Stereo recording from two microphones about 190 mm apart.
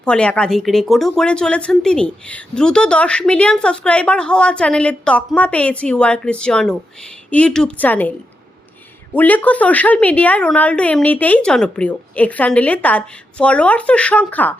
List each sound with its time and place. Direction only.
0.0 s a woman's voice: 5° left (ahead or behind)
9.1 s a woman's voice: 10° left (ahead or behind)